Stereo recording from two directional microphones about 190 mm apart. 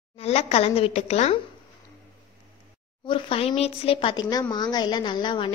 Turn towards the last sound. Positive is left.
turn(degrees=25)  # may be behind; listen again after turning